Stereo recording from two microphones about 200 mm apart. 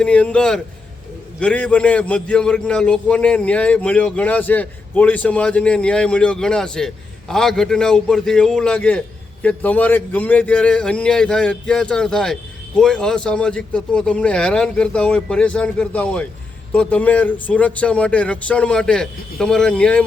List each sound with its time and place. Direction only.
0.0 s a man's voice: 5° left (ahead or behind)